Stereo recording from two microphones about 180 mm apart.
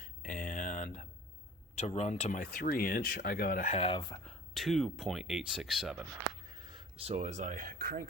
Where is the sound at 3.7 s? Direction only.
30° left (ahead or behind).